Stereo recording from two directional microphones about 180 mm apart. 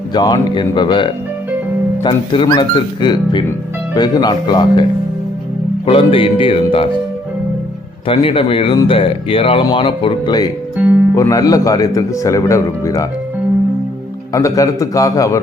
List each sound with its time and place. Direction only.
0.1 s speech: 25° left (ahead or behind)
8.0 s speech: 30° left (ahead or behind)
14.3 s speech: 20° left (ahead or behind)